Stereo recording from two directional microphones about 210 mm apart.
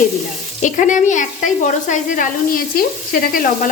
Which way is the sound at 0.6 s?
35° left (ahead or behind).